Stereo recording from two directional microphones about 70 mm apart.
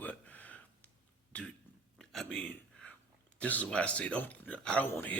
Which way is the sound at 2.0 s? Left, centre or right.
Centre.